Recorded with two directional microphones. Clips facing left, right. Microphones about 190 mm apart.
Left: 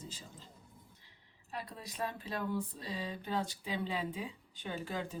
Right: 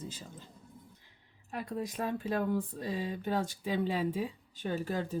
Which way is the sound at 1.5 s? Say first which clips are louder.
Right 8 dB; 50° right (ahead or behind).